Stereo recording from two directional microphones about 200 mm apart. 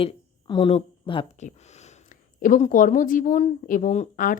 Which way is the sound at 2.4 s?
40° left (ahead or behind).